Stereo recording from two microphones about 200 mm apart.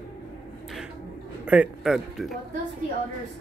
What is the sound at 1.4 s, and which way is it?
Speech, 5° right (ahead or behind).